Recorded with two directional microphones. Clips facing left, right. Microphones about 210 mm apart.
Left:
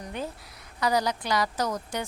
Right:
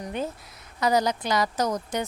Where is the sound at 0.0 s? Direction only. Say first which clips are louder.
Right 4 dB; 20° right (ahead or behind).